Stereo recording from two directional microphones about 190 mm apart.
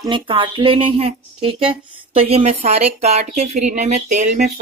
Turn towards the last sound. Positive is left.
turn(degrees=-40)  # may be behind; listen again after turning